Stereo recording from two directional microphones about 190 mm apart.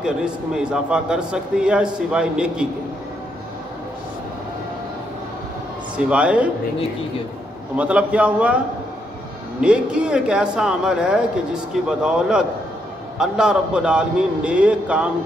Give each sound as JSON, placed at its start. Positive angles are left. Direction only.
{"t": 0.0, "sound": "a man's voice", "side_deg": -5}
{"t": 5.9, "sound": "a man's voice", "side_deg": -5}
{"t": 7.7, "sound": "a man's voice", "side_deg": -5}
{"t": 9.6, "sound": "a man's voice", "side_deg": -5}